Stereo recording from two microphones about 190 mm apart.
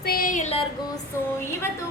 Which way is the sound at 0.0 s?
50° left (ahead or behind).